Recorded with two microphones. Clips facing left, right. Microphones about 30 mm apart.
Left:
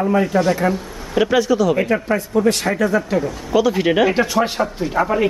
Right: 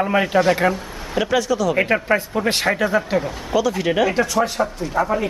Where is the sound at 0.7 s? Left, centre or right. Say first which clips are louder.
Left 1 dB; centre.